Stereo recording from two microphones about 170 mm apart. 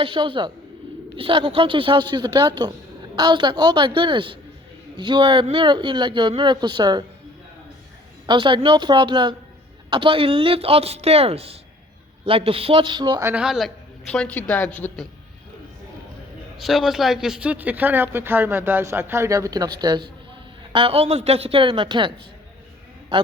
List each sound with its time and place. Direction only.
0.0 s speech: 30° right (ahead or behind)
8.3 s speech: 30° right (ahead or behind)
13.2 s a woman's voice: 5° right (ahead or behind)
16.6 s speech: centre (ahead or behind); by 22.1 s 30° right (ahead or behind)